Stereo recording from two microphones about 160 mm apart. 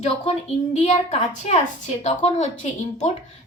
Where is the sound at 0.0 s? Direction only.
40° left (ahead or behind).